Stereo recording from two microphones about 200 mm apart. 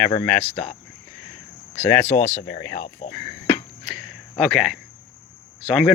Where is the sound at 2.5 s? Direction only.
50° left (ahead or behind).